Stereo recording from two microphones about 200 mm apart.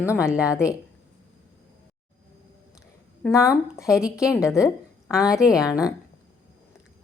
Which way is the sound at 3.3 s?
15° left (ahead or behind).